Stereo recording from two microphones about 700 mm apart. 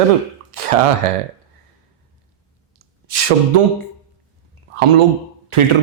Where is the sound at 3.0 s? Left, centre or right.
Right.